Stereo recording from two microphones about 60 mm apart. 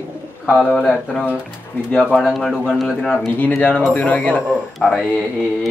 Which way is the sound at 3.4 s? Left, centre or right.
Left.